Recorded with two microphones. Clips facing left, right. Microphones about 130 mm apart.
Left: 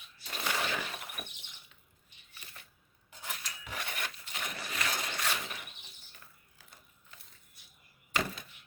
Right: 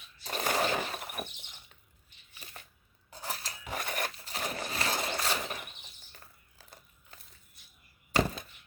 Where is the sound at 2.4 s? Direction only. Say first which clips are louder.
Right 4 dB; 35° right (ahead or behind).